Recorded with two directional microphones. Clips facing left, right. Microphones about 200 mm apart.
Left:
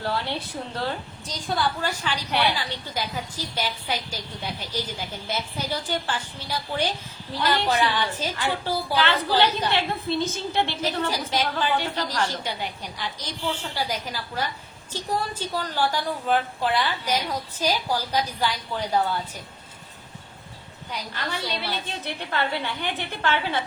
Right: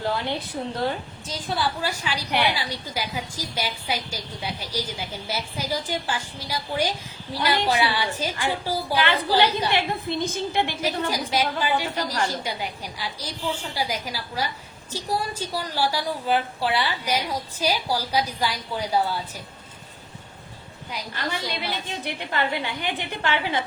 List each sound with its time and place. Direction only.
0.0 s a woman's voice: 15° right (ahead or behind)
20.9 s a woman's voice: 10° right (ahead or behind)